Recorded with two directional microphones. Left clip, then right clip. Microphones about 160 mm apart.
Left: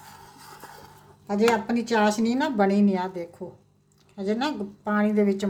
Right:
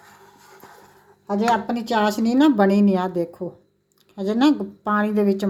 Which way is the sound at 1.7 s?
50° right (ahead or behind).